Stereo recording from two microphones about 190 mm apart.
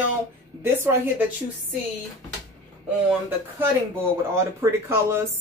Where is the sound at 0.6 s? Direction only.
10° right (ahead or behind).